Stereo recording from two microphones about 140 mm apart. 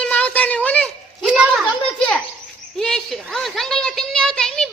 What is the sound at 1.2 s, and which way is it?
Speech, 10° right (ahead or behind).